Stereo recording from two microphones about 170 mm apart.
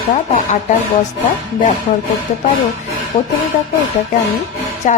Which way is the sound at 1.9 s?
50° left (ahead or behind).